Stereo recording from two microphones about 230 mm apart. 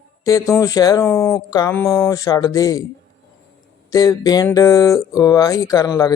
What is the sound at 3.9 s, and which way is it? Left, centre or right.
Speech, centre.